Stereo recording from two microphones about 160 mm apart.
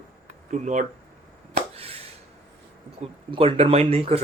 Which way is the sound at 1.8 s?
40° right (ahead or behind).